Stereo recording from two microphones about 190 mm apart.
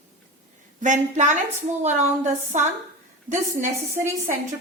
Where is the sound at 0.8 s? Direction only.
40° right (ahead or behind).